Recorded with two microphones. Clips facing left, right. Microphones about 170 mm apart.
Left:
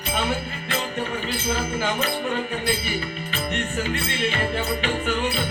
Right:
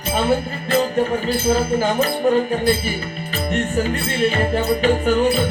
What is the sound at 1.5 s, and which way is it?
Music, 40° right (ahead or behind).